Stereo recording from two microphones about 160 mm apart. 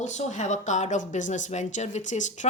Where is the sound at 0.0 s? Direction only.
45° left (ahead or behind).